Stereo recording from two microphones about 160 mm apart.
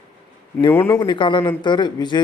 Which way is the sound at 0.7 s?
15° left (ahead or behind).